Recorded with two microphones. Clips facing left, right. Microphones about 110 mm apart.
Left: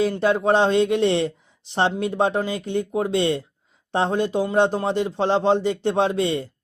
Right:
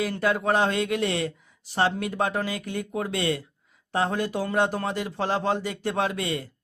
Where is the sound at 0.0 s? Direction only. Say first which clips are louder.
Left 5 dB; 25° left (ahead or behind).